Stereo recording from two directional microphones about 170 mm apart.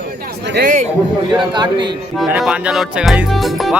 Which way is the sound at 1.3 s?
25° right (ahead or behind).